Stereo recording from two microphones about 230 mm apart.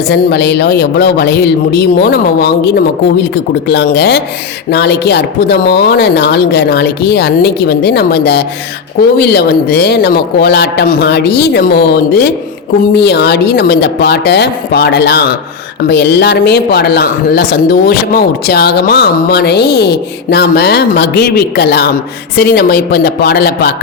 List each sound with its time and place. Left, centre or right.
0.1 s speech: left